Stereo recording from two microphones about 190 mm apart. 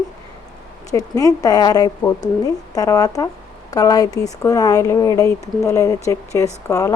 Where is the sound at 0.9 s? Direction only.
20° left (ahead or behind).